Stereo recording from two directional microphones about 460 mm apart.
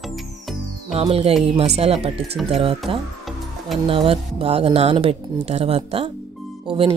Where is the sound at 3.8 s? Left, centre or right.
Centre.